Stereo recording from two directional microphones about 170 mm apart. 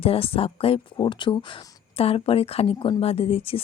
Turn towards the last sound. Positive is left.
turn(degrees=35)  # may be behind; listen again after turning